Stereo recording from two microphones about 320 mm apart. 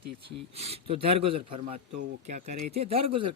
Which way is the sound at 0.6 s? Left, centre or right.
Centre.